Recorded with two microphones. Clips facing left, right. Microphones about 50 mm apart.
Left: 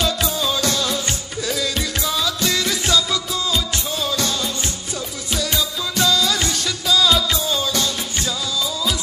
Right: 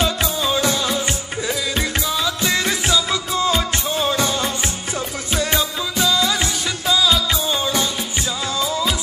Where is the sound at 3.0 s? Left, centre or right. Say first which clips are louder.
Right 3 dB; right.